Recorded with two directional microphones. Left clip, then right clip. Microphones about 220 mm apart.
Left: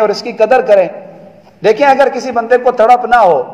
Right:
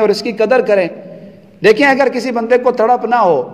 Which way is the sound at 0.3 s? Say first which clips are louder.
Left 7 dB; 25° right (ahead or behind).